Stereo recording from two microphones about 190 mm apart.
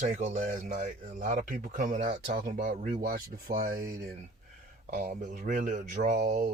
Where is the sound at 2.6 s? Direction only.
45° right (ahead or behind).